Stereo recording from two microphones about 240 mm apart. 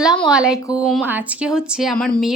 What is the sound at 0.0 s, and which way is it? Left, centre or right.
A woman's voice, centre.